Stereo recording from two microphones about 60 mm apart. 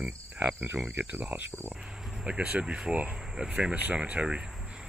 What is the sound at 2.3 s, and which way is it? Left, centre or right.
Speech, centre.